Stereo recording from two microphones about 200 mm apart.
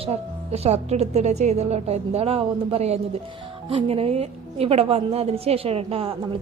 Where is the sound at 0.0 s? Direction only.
30° right (ahead or behind).